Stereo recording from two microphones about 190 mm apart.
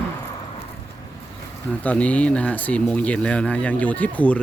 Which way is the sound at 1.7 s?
5° left (ahead or behind).